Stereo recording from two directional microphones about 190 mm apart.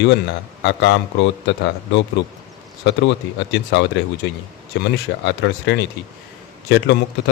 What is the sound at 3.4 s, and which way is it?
Speech, 65° left (ahead or behind).